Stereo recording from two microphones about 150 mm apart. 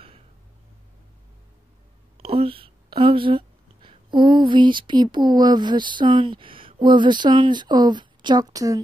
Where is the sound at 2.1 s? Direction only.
40° right (ahead or behind).